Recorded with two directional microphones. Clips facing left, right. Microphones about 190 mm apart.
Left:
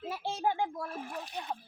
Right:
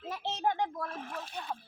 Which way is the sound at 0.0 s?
10° left (ahead or behind).